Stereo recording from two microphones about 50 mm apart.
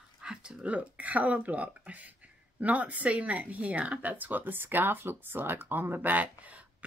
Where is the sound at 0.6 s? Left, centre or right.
Right.